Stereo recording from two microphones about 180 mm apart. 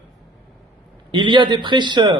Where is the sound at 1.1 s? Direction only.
25° right (ahead or behind).